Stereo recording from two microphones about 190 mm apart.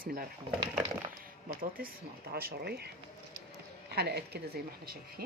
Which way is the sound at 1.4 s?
50° right (ahead or behind).